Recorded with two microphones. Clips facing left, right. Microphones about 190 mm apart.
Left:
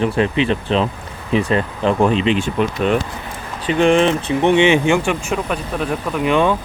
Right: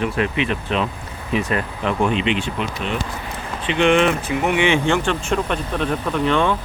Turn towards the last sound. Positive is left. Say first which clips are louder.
# left 2 dB
turn(degrees=10)  # may be behind; listen again after turning